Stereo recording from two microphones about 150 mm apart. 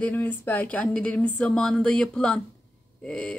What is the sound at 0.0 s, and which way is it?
Speech, 10° left (ahead or behind).